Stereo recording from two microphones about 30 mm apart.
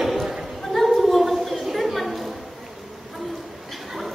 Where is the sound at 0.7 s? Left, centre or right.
Centre.